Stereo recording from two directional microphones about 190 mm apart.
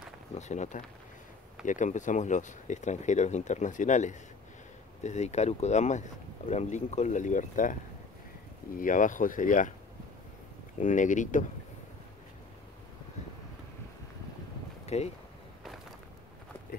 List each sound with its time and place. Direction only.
0.3 s speech: 40° left (ahead or behind)
8.7 s speech: 45° left (ahead or behind)
10.8 s speech: 40° left (ahead or behind)
14.9 s speech: 35° left (ahead or behind)